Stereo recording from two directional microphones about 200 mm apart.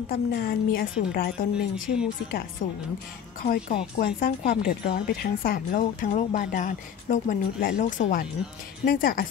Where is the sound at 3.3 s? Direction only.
45° left (ahead or behind).